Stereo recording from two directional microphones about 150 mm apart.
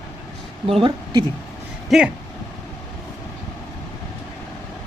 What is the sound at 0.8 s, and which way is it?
Speech, 30° right (ahead or behind).